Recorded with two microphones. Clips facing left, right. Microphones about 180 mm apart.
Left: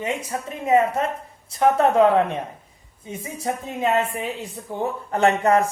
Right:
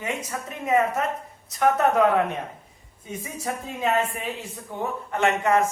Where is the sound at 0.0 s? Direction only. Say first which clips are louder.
Left 4 dB; 30° left (ahead or behind).